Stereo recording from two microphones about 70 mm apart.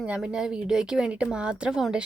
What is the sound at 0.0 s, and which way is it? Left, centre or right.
Speech, centre.